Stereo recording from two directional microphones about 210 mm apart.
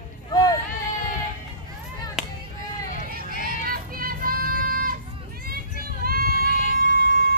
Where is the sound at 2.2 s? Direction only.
5° right (ahead or behind).